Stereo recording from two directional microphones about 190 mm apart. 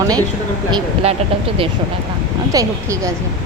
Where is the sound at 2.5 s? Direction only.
15° right (ahead or behind).